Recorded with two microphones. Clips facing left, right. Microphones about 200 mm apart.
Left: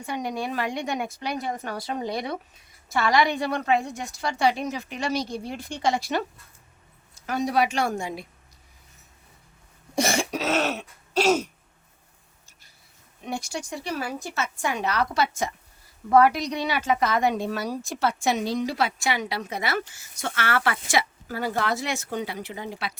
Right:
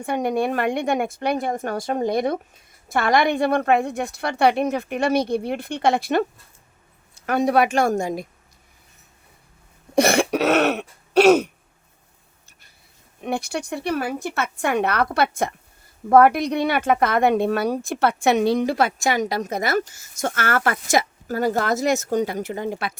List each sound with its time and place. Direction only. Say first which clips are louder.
0.0 s a woman's voice: right 8 dB; 55° right (ahead or behind)
9.9 s cough: right 7 dB; 60° right (ahead or behind)
13.2 s a woman's voice: right 6 dB; 60° right (ahead or behind)